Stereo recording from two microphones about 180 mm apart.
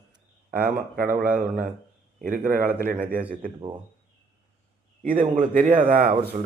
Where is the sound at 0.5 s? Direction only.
55° right (ahead or behind).